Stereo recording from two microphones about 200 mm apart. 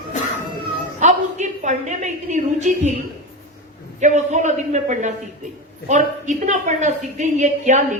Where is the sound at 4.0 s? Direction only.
35° right (ahead or behind).